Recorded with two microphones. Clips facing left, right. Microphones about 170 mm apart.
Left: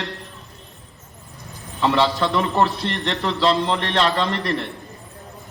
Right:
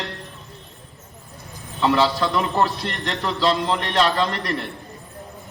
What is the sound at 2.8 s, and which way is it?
Speech, 30° left (ahead or behind).